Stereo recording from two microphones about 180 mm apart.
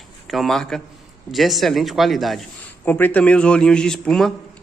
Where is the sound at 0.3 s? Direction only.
Centre (ahead or behind).